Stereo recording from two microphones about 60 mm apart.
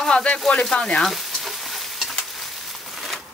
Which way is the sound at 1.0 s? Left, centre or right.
Centre.